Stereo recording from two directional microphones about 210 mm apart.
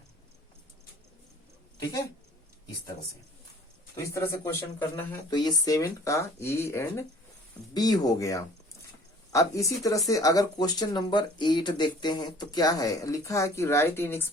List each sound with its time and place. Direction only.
1.8 s speech: 15° left (ahead or behind)
4.1 s speech: 10° left (ahead or behind)